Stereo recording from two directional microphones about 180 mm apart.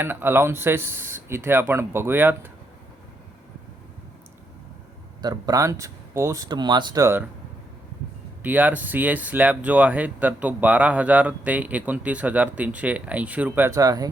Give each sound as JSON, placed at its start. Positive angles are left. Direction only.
{"t": 0.0, "sound": "speech", "side_deg": -10}
{"t": 5.2, "sound": "speech", "side_deg": -20}
{"t": 8.4, "sound": "speech", "side_deg": -10}